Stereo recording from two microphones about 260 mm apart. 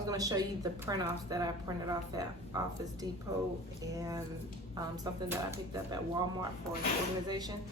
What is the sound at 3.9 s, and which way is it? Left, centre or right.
Speech, centre.